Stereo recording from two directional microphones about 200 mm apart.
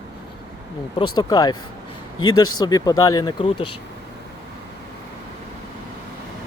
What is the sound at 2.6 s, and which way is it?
Speech, 20° left (ahead or behind).